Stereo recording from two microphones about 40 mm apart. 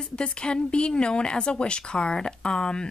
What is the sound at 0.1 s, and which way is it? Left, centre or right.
Speech, left.